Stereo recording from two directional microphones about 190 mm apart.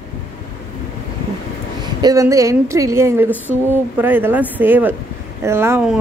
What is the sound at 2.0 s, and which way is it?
A woman's voice, 15° right (ahead or behind).